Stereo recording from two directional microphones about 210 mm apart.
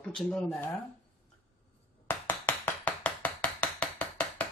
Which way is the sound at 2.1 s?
10° left (ahead or behind).